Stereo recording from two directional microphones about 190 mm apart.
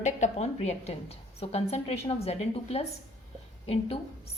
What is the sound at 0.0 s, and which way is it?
A woman's voice, 35° left (ahead or behind).